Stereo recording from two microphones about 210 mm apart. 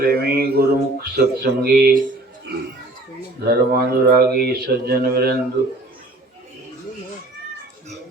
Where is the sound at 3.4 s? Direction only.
50° right (ahead or behind).